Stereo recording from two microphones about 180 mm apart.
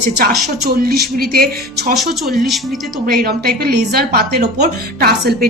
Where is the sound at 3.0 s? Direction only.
55° right (ahead or behind).